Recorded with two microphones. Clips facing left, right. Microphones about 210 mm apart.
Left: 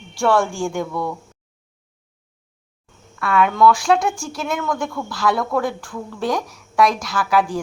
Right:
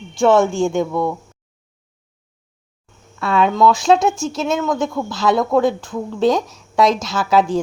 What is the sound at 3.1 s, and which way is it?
Speech, 25° right (ahead or behind).